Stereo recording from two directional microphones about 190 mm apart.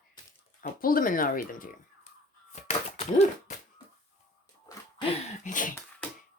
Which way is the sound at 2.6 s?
35° left (ahead or behind).